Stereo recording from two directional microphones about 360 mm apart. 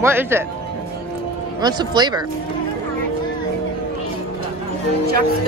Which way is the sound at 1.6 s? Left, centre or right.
Centre.